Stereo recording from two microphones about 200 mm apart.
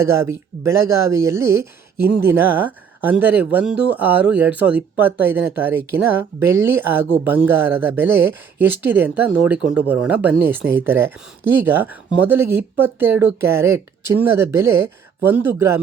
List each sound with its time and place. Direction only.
0.0 s speech: 15° right (ahead or behind)